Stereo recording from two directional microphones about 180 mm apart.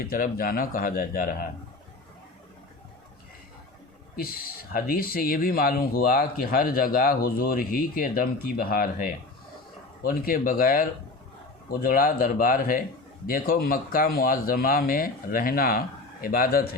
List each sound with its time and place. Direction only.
0.0 s speech: 50° left (ahead or behind)
4.1 s speech: 55° left (ahead or behind)